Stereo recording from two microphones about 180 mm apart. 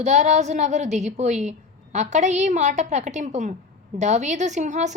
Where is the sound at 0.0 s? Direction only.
40° right (ahead or behind).